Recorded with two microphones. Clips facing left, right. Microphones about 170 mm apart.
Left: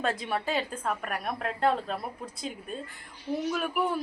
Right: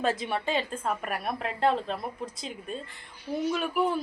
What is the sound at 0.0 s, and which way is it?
A man's voice, centre (ahead or behind).